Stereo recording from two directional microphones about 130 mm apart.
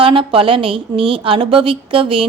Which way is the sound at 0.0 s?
45° right (ahead or behind).